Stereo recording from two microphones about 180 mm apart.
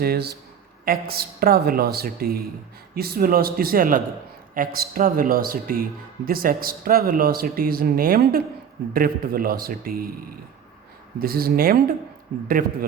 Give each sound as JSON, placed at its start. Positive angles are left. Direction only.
{"t": 0.0, "sound": "a woman's voice", "side_deg": -60}
{"t": 11.2, "sound": "a woman's voice", "side_deg": -55}